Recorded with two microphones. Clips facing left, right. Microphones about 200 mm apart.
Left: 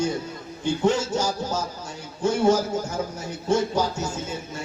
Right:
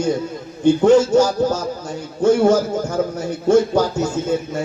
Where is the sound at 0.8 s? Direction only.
50° right (ahead or behind).